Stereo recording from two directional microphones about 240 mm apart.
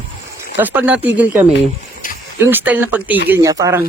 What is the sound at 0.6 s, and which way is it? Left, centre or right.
Speech, centre.